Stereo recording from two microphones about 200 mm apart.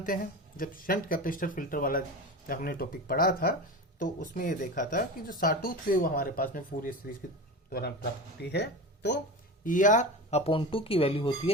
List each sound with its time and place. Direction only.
0.0 s speech: 45° left (ahead or behind)
9.6 s speech: 40° left (ahead or behind)